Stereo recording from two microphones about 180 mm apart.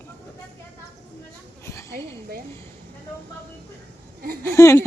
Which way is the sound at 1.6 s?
15° left (ahead or behind).